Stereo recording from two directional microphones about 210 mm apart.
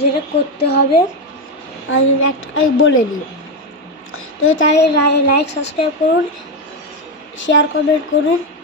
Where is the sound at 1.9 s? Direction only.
70° left (ahead or behind).